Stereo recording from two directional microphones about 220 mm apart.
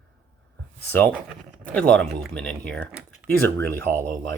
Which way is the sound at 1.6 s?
5° left (ahead or behind).